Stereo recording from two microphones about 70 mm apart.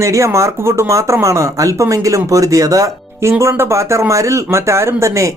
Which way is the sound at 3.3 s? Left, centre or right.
Right.